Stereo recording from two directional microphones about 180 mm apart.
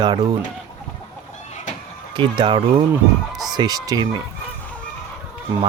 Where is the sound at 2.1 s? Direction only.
25° right (ahead or behind).